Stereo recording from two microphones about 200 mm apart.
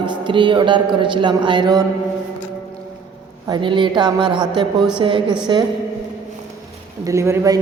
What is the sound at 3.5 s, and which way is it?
A woman's voice, 25° right (ahead or behind).